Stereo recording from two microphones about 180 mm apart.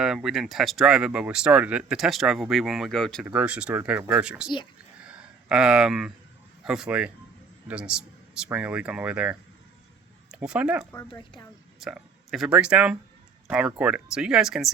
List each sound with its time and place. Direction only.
0.0 s speech: 5° right (ahead or behind)
5.0 s a sound: 5° right (ahead or behind)
6.7 s speech: 5° right (ahead or behind)
11.1 s speech: 25° left (ahead or behind)
11.8 s speech: centre (ahead or behind)